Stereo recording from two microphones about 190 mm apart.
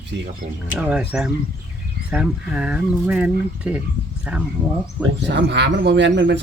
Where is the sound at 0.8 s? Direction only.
5° right (ahead or behind).